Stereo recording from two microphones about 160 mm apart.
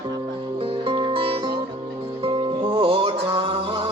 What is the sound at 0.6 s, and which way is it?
Music, 35° right (ahead or behind).